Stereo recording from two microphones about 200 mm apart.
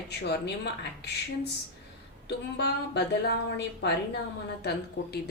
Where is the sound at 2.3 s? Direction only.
55° left (ahead or behind).